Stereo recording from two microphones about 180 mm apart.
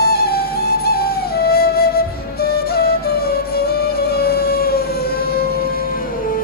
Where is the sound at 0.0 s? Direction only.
60° left (ahead or behind).